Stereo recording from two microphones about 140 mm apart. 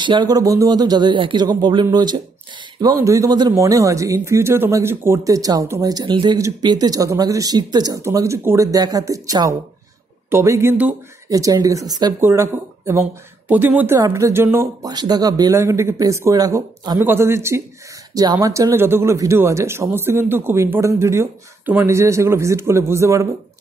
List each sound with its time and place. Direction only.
0.0 s a man's voice: 35° right (ahead or behind); by 11.0 s 15° right (ahead or behind)
11.2 s a man's voice: 25° right (ahead or behind)
17.0 s a man's voice: 15° right (ahead or behind)